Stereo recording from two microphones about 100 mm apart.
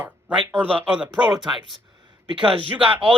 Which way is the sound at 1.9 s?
50° right (ahead or behind).